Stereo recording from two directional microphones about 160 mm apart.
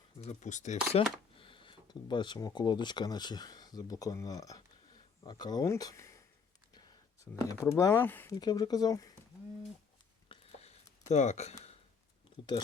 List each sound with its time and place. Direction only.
0.2 s speech: 45° left (ahead or behind)
0.9 s speech: 30° left (ahead or behind)
7.4 s speech: 20° left (ahead or behind)
8.4 s speech: 25° left (ahead or behind)
10.2 s a sound: 40° left (ahead or behind)